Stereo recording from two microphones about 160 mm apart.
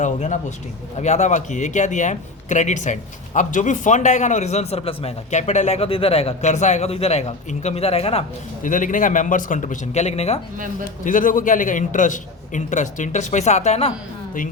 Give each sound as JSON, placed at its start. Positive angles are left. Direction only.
{"t": 0.0, "sound": "a man's voice", "side_deg": 50}
{"t": 8.6, "sound": "a man's voice", "side_deg": 55}
{"t": 11.0, "sound": "a man's voice", "side_deg": 55}